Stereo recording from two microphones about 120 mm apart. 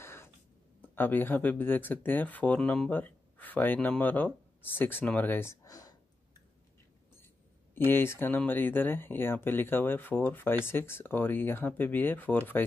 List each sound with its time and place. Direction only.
0.0 s a sound: 20° left (ahead or behind)
0.9 s speech: 15° left (ahead or behind); by 6.4 s 30° left (ahead or behind)
7.7 s speech: 20° left (ahead or behind)